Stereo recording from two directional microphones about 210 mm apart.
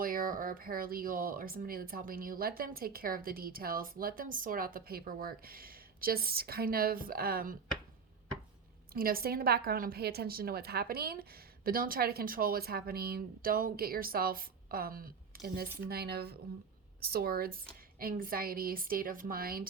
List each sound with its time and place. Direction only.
0.0 s speech: 40° right (ahead or behind)
8.9 s speech: 45° right (ahead or behind)